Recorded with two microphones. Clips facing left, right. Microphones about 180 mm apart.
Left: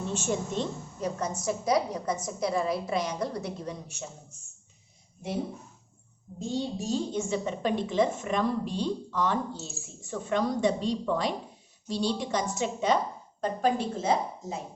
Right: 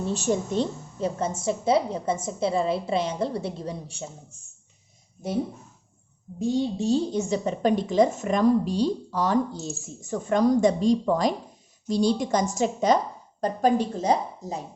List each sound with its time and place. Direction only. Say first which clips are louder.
0.1 s a woman's voice: right 5 dB; 35° right (ahead or behind)
6.4 s a woman's voice: right 7 dB; 15° right (ahead or behind)
6.7 s a woman's voice: right 6 dB; 30° right (ahead or behind)